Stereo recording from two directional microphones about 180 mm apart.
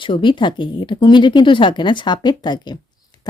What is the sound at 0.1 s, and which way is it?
Speech, 25° left (ahead or behind).